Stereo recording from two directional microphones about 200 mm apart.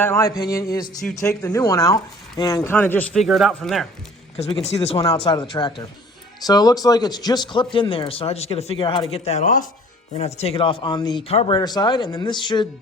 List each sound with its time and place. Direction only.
0.0 s speech: 15° left (ahead or behind)
4.4 s speech: 30° left (ahead or behind)